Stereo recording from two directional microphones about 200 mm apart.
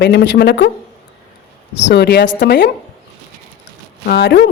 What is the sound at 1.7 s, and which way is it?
Speech, 60° left (ahead or behind).